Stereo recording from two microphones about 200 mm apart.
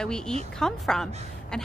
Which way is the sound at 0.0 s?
5° left (ahead or behind).